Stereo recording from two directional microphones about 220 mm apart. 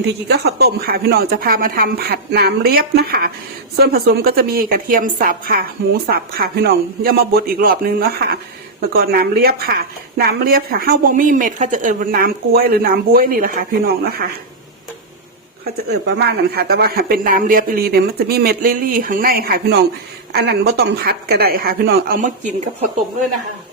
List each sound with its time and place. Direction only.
0.3 s a woman's voice: 50° right (ahead or behind)
16.0 s a woman's voice: 50° right (ahead or behind)